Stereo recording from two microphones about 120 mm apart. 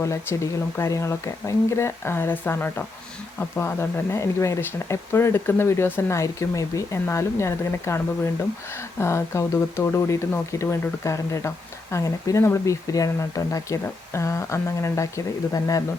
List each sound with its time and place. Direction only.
0.0 s speech: 25° left (ahead or behind)